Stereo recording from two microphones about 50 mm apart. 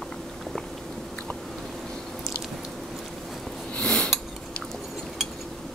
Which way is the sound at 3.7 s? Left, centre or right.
Centre.